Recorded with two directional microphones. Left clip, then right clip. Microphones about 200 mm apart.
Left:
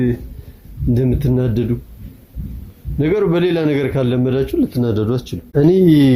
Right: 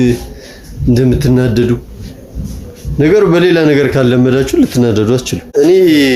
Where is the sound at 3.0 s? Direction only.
Centre (ahead or behind).